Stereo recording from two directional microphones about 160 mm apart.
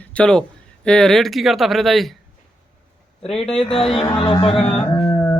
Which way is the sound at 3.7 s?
35° left (ahead or behind).